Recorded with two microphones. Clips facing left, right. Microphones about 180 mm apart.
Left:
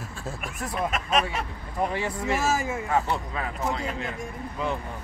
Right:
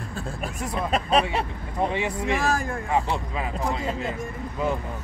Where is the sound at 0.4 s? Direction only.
35° right (ahead or behind).